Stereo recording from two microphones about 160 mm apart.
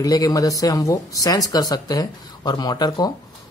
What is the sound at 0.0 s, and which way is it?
Speech, 20° left (ahead or behind).